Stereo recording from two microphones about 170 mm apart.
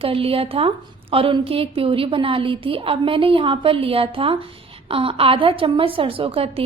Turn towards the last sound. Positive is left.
turn(degrees=-35)  # may be behind; listen again after turning